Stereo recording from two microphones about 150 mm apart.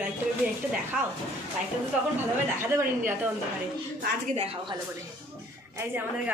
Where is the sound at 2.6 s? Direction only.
15° right (ahead or behind).